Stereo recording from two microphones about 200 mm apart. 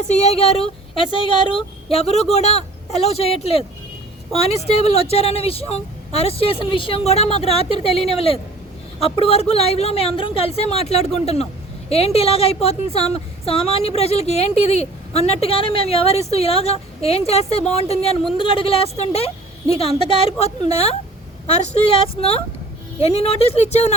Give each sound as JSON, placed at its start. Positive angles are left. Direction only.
{"t": 0.1, "sound": "a woman's voice", "side_deg": 35}